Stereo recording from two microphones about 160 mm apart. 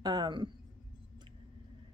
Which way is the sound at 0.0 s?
25° right (ahead or behind).